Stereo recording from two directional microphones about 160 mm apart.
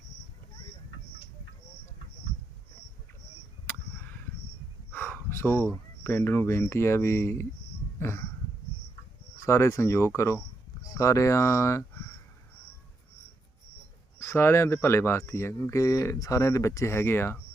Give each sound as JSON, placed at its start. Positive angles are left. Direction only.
{"t": 4.9, "sound": "speech", "side_deg": 10}
{"t": 7.9, "sound": "a sound", "side_deg": 15}
{"t": 9.4, "sound": "speech", "side_deg": 15}
{"t": 14.2, "sound": "speech", "side_deg": 15}